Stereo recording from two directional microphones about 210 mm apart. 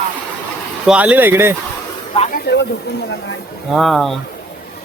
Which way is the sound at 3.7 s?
Centre (ahead or behind).